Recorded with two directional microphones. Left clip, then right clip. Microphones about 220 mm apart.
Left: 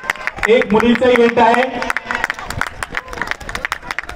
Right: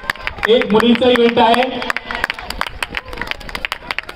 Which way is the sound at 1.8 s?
40° right (ahead or behind).